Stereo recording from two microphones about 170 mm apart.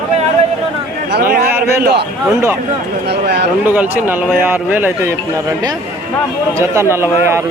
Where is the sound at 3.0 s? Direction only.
80° right.